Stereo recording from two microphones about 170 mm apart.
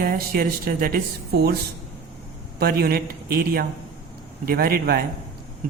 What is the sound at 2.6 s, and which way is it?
Speech, 65° right (ahead or behind).